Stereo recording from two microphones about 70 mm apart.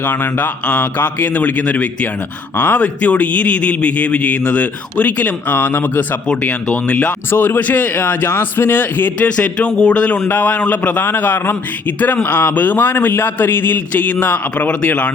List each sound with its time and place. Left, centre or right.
0.0 s a man's voice: left
6.4 s a man's voice: centre
7.3 s a man's voice: left